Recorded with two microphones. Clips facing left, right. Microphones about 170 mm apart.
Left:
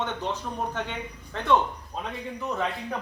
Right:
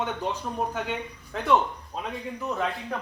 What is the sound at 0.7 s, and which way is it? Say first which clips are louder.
Speech: right 2 dB; 10° right (ahead or behind).